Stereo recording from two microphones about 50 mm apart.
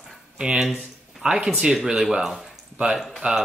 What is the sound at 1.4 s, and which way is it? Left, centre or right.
Speech, centre.